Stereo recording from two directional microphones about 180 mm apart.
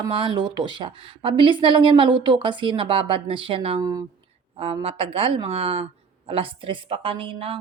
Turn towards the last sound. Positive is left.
turn(degrees=-30)  # may be behind; listen again after turning